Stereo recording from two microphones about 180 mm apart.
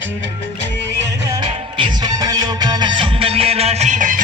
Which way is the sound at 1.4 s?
25° right (ahead or behind).